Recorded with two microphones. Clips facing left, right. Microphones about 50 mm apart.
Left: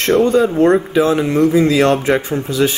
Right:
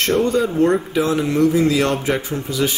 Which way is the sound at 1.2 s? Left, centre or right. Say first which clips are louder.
Left 3 dB; left.